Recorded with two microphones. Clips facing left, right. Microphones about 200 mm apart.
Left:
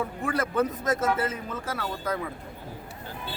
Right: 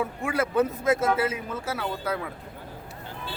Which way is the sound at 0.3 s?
10° right (ahead or behind).